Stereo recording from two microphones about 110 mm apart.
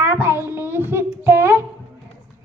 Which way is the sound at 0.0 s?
25° right (ahead or behind).